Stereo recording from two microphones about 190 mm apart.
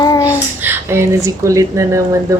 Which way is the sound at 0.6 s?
10° right (ahead or behind).